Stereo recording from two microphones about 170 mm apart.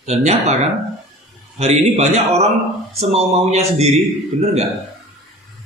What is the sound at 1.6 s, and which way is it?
Speech, 40° right (ahead or behind).